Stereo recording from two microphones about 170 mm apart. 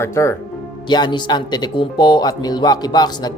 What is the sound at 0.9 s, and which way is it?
A man's voice, 25° left (ahead or behind).